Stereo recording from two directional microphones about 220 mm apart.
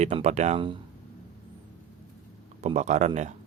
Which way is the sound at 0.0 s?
30° right (ahead or behind).